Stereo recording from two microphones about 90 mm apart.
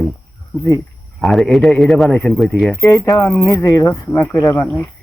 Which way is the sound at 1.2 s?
Centre (ahead or behind).